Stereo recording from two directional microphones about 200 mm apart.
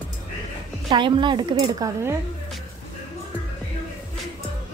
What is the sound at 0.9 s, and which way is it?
Speech, 25° right (ahead or behind).